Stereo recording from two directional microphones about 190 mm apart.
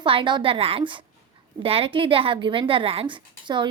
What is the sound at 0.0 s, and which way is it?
Speech, 25° right (ahead or behind).